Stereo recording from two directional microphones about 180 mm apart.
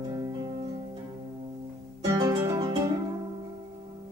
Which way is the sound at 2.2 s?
20° right (ahead or behind).